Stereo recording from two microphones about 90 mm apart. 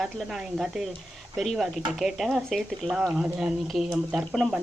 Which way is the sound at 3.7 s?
Centre (ahead or behind).